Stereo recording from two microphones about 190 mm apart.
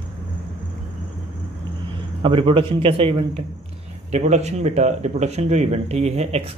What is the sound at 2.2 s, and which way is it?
A man's voice, 25° right (ahead or behind).